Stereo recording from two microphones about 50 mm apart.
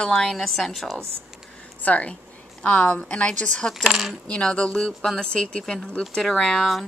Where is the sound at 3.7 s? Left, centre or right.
Centre.